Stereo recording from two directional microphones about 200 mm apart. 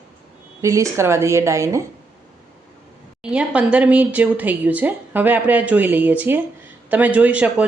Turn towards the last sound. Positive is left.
turn(degrees=-5)  # may be behind; listen again after turning